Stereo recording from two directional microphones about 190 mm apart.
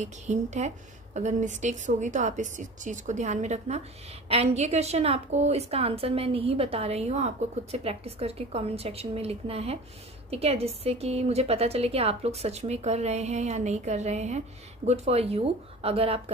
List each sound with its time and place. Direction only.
0.0 s a woman's voice: 40° right (ahead or behind)